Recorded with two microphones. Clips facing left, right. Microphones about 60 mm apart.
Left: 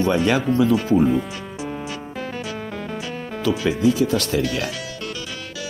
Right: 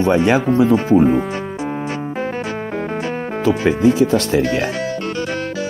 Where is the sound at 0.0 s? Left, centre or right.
Right.